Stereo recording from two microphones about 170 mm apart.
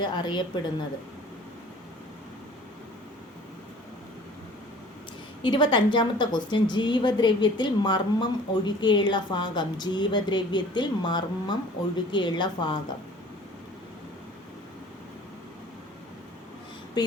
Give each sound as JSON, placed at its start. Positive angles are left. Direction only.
{"t": 0.0, "sound": "a woman's voice", "side_deg": 25}
{"t": 5.4, "sound": "a woman's voice", "side_deg": 25}